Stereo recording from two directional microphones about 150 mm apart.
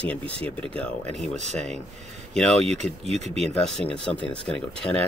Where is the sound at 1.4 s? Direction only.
50° right (ahead or behind).